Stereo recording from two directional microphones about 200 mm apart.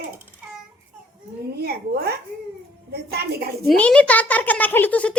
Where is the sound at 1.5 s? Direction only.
50° right (ahead or behind).